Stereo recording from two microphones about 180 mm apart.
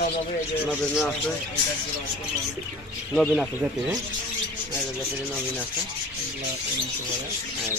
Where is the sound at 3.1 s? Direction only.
Centre (ahead or behind).